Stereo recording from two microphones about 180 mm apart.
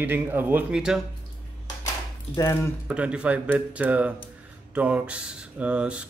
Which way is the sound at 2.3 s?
15° left (ahead or behind).